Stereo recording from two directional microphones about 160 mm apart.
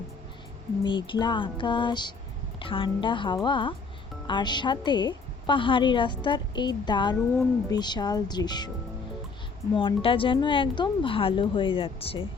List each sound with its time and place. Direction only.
0.9 s a woman's voice: 30° left (ahead or behind)
9.7 s speech: 35° left (ahead or behind)